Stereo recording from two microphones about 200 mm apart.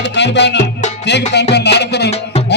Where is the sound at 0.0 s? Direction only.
60° left (ahead or behind).